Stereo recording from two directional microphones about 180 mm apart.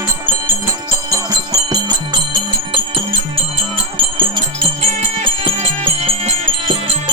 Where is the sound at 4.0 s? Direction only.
25° right (ahead or behind).